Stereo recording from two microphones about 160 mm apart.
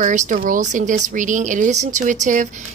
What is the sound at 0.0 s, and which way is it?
A woman's voice, 55° right (ahead or behind).